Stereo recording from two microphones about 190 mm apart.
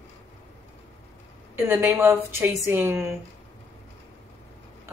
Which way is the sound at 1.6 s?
15° right (ahead or behind).